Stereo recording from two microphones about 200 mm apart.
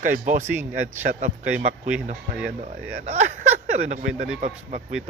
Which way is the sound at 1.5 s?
5° right (ahead or behind).